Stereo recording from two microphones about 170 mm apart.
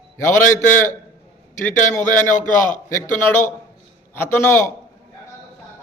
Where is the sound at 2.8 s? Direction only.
15° left (ahead or behind).